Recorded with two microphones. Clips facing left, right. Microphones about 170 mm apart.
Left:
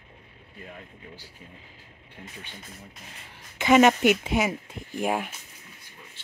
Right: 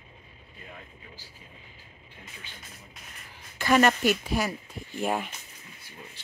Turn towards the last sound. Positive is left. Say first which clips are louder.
# left 2 dB
turn(degrees=10)  # may be behind; listen again after turning